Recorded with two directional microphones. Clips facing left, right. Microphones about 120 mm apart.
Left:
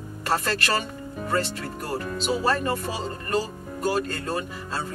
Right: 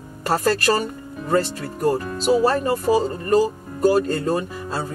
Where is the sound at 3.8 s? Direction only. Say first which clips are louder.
Right 8 dB; 35° right (ahead or behind).